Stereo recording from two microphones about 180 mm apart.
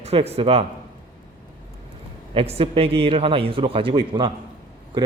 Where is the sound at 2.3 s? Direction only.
30° right (ahead or behind).